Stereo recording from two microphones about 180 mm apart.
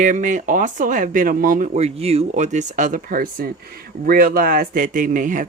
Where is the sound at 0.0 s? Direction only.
45° right (ahead or behind).